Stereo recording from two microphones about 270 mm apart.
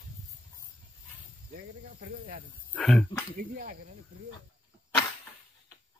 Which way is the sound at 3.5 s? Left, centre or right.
Right.